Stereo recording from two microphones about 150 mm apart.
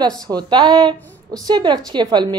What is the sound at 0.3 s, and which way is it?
A woman's voice, 30° right (ahead or behind).